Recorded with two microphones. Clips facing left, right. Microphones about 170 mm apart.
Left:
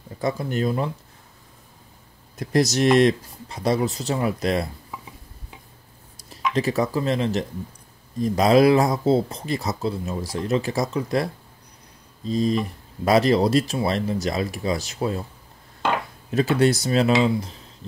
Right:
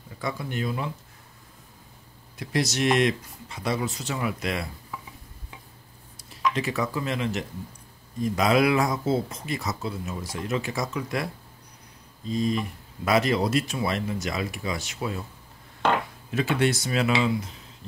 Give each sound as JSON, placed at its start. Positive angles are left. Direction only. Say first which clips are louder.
{"t": 0.2, "sound": "speech", "louder": "left 6 dB", "side_deg": 40}
{"t": 2.3, "sound": "speech", "louder": "left 6 dB", "side_deg": 40}
{"t": 6.5, "sound": "speech", "louder": "left 6 dB", "side_deg": 35}
{"t": 12.3, "sound": "speech", "louder": "left 4 dB", "side_deg": 35}
{"t": 16.3, "sound": "speech", "louder": "left 5 dB", "side_deg": 40}